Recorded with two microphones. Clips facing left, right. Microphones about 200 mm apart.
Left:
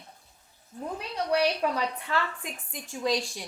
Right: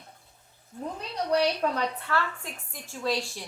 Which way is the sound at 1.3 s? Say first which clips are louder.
Right 1 dB; 15° left (ahead or behind).